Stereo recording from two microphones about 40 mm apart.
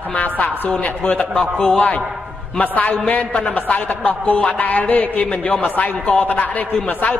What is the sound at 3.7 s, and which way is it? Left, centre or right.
A man's voice, left.